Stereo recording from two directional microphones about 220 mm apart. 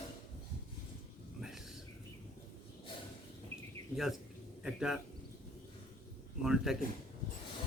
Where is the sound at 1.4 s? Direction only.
Centre (ahead or behind).